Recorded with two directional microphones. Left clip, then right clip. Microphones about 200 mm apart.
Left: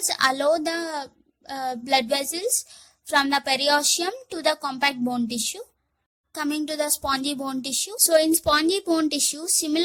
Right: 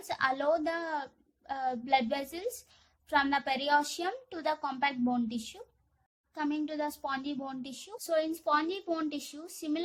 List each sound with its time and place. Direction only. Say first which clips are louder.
0.1 s a woman's voice: left 8 dB; 40° left (ahead or behind)